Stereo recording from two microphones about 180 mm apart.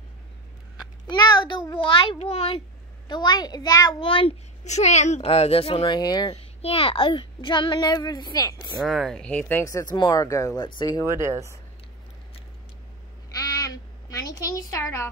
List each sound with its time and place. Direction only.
1.0 s a child's voice: 25° left (ahead or behind)
8.8 s a child's voice: centre (ahead or behind); by 11.1 s 20° left (ahead or behind)
11.1 s speech: 15° right (ahead or behind)
13.3 s a sound: 20° left (ahead or behind)